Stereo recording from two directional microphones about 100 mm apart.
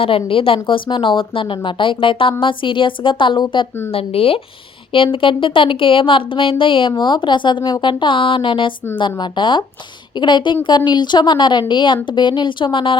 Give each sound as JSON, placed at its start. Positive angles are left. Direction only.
{"t": 0.0, "sound": "speech", "side_deg": 65}
{"t": 3.9, "sound": "speech", "side_deg": 75}
{"t": 4.9, "sound": "a woman's voice", "side_deg": 60}